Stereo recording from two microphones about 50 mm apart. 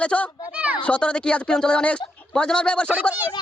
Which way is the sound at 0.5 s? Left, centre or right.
Right.